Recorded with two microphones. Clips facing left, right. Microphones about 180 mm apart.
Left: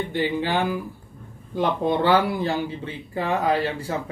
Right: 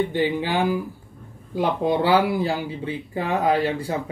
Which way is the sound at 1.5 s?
10° right (ahead or behind).